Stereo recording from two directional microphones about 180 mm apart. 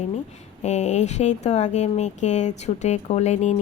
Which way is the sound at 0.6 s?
40° left (ahead or behind).